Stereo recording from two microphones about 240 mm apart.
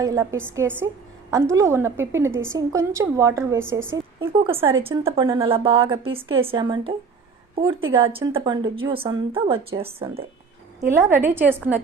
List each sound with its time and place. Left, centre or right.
0.0 s a woman's voice: centre
4.5 s a woman's voice: centre
10.8 s a woman's voice: centre